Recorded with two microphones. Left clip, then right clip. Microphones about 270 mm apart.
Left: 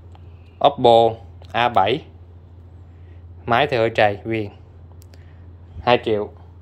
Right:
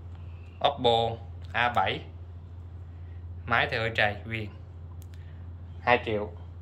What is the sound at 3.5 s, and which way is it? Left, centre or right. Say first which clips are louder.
Speech: left 9 dB; left.